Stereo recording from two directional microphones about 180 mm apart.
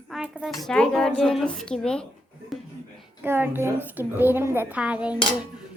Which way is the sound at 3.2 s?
10° right (ahead or behind).